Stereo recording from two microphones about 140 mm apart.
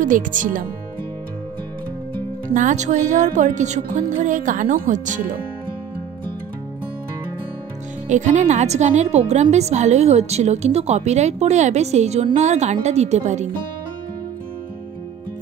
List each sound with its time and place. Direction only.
0.0 s speech: 70° right (ahead or behind)
2.5 s speech: 60° right (ahead or behind)
8.1 s a woman's voice: 60° right (ahead or behind)